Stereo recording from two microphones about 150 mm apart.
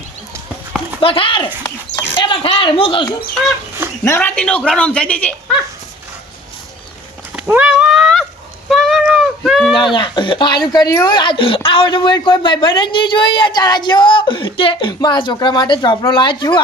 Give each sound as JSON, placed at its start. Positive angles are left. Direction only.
{"t": 1.0, "sound": "speech", "side_deg": 35}
{"t": 4.0, "sound": "speech", "side_deg": 15}
{"t": 7.3, "sound": "a sound", "side_deg": -10}
{"t": 9.7, "sound": "speech", "side_deg": 35}